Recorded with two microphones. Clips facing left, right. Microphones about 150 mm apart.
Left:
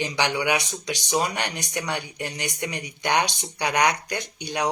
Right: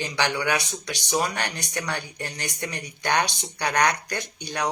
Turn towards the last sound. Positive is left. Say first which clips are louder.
# left 2 dB
turn(degrees=15)  # may be behind; listen again after turning